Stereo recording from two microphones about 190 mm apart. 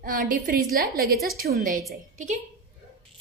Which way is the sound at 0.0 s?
45° right (ahead or behind).